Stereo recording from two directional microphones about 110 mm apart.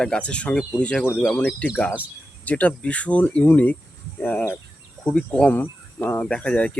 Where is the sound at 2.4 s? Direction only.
15° left (ahead or behind).